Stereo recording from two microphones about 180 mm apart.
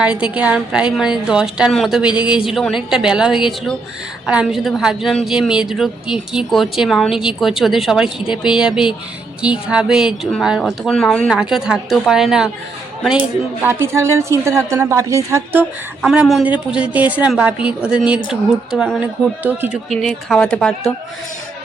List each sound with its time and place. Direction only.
0.0 s a woman's voice: 5° right (ahead or behind)
13.7 s a woman's voice: 15° right (ahead or behind)
16.0 s a woman's voice: 5° right (ahead or behind)